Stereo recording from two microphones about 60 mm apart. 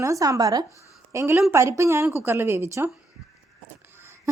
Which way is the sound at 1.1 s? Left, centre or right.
Right.